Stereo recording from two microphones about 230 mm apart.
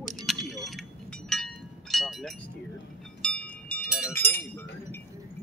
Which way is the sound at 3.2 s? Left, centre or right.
Centre.